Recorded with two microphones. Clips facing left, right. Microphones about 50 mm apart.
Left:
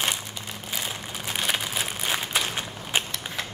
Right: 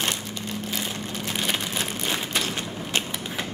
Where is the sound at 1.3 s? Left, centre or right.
Centre.